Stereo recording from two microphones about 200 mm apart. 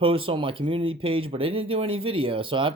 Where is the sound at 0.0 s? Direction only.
25° right (ahead or behind).